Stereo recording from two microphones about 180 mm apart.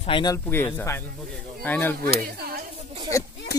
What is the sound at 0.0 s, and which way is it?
Speech, 25° left (ahead or behind).